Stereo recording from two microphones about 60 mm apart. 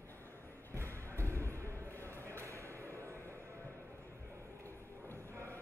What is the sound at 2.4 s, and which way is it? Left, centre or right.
Music, right.